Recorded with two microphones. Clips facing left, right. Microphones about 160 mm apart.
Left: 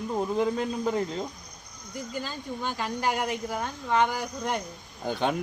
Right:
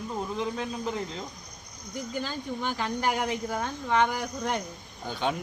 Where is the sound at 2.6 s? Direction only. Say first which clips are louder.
Even; 10° left (ahead or behind).